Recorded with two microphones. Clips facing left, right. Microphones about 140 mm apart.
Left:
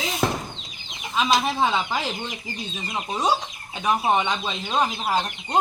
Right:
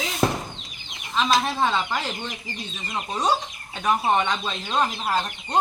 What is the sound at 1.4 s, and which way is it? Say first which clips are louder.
Speech: left 1 dB; 10° left (ahead or behind).